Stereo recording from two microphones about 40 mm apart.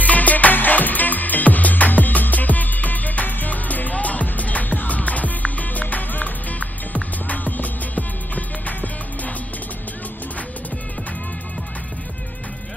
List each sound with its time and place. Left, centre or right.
0.0 s music: left